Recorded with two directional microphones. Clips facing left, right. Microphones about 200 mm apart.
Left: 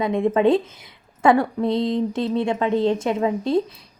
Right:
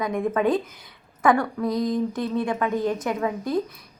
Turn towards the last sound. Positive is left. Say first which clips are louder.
# left 4 dB
turn(degrees=25)  # may be behind; listen again after turning